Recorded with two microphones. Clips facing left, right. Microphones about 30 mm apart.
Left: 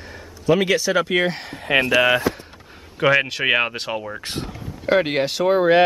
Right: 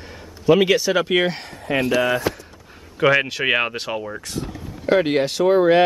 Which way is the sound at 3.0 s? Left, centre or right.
Centre.